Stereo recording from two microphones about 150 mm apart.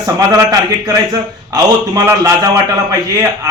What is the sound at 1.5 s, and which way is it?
Speech, 25° right (ahead or behind).